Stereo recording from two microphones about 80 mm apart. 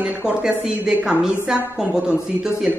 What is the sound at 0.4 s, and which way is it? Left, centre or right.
Speech, centre.